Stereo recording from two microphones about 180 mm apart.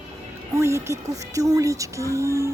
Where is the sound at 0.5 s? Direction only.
15° right (ahead or behind).